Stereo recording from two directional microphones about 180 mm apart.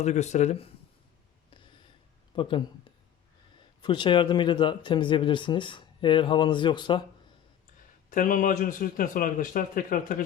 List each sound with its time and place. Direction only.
0.0 s speech: 40° left (ahead or behind)
2.3 s speech: 30° left (ahead or behind)
8.1 s a man's voice: 50° left (ahead or behind)